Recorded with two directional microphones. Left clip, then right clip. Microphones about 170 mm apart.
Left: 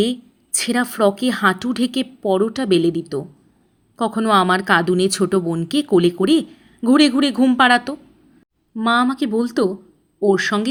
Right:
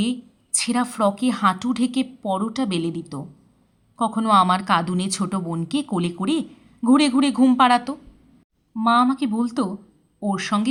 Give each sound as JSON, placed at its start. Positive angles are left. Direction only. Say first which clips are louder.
{"t": 0.0, "sound": "a woman's voice", "louder": "left 7 dB", "side_deg": 25}